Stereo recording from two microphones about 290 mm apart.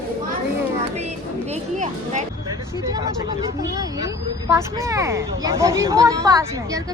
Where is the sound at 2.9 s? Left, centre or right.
Centre.